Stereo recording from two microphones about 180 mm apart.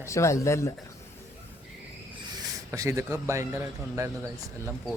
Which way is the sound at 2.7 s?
15° right (ahead or behind).